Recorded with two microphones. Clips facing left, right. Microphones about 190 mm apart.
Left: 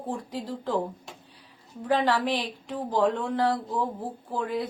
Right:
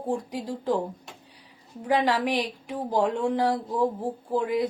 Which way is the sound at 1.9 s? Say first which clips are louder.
Right 1 dB; 15° right (ahead or behind).